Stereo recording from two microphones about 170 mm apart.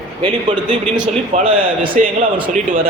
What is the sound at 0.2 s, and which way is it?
A man's voice, 30° right (ahead or behind).